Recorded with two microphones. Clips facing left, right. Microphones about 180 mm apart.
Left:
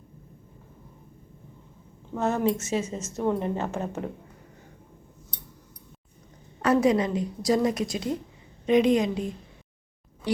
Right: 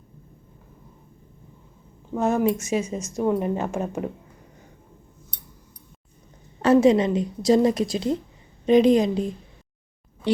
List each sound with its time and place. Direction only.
2.1 s a woman's voice: 15° right (ahead or behind)
6.6 s a woman's voice: 25° right (ahead or behind)